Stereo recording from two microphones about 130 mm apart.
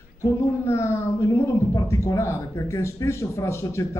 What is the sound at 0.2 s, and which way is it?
Speech, 20° left (ahead or behind).